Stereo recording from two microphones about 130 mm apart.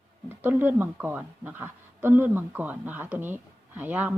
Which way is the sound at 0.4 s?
15° right (ahead or behind).